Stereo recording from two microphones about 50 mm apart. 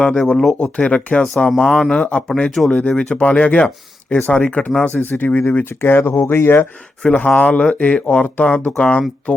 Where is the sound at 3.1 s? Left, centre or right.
Left.